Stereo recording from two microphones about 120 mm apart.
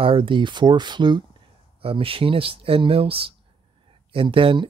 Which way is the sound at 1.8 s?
50° right (ahead or behind).